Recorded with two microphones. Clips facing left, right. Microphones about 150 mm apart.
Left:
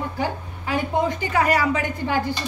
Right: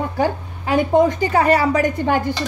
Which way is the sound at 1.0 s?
30° right (ahead or behind).